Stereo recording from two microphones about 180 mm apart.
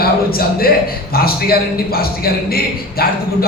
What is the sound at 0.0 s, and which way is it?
A man's voice, 55° left (ahead or behind).